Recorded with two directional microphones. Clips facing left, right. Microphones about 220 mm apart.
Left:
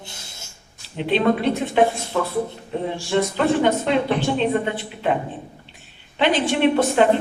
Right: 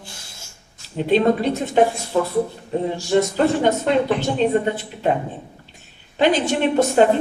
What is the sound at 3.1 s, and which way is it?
A woman's voice, 40° right (ahead or behind).